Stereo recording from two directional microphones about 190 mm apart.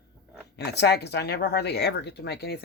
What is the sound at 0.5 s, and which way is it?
Speech, 60° left (ahead or behind).